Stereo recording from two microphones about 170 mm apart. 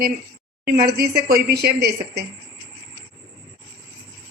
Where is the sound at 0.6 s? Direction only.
65° right (ahead or behind).